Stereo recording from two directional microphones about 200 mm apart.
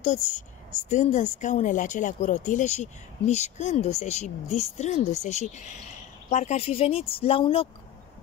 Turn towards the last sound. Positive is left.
turn(degrees=25)  # may be behind; listen again after turning